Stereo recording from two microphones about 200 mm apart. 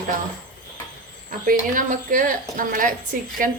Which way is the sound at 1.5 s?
45° right (ahead or behind).